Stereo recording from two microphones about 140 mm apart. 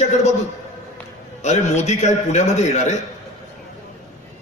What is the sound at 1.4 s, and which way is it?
A man's voice, 55° left (ahead or behind).